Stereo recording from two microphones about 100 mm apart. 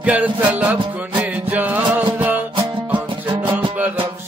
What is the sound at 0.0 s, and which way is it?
Music, 15° right (ahead or behind).